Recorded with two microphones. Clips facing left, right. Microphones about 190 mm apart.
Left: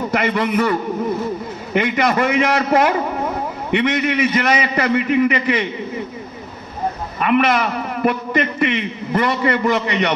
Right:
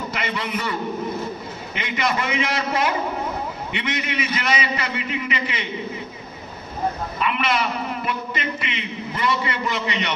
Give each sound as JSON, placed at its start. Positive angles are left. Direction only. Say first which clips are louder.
{"t": 0.1, "sound": "a man's voice", "louder": "left 12 dB", "side_deg": 50}
{"t": 7.2, "sound": "a man's voice", "louder": "left 9 dB", "side_deg": 50}